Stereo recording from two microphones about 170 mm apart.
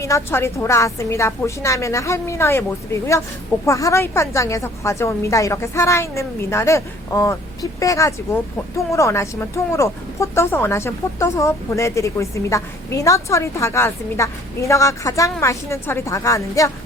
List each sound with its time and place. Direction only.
0.0 s a woman's voice: 15° left (ahead or behind)